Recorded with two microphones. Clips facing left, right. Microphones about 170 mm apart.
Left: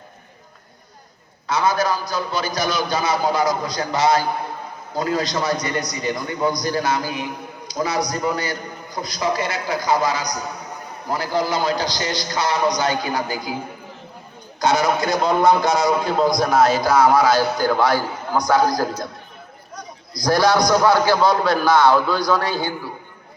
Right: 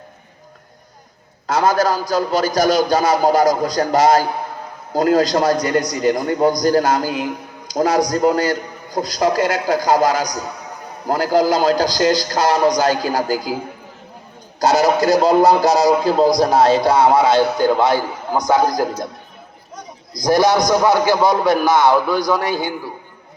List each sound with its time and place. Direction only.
1.5 s a man's voice: 45° right (ahead or behind)
14.6 s a man's voice: 40° right (ahead or behind); by 19.0 s 20° right (ahead or behind)
20.1 s a man's voice: 20° right (ahead or behind)